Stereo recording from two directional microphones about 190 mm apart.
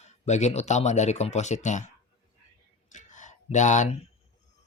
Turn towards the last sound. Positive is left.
turn(degrees=40)  # may be behind; listen again after turning